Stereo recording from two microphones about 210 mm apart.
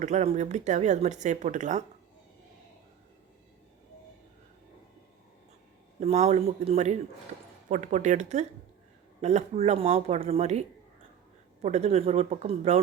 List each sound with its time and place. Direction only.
0.0 s speech: 35° right (ahead or behind)
6.0 s speech: 30° right (ahead or behind)